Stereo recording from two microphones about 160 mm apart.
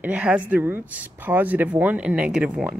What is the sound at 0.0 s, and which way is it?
Speech, 10° right (ahead or behind).